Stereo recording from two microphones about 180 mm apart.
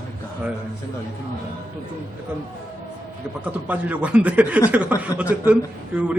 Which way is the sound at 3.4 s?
10° right (ahead or behind).